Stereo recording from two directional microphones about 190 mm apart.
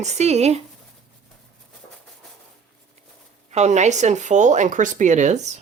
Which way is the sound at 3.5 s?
35° right (ahead or behind).